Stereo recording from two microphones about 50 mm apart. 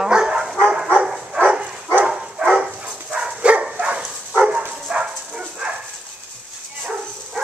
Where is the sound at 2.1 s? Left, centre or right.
Centre.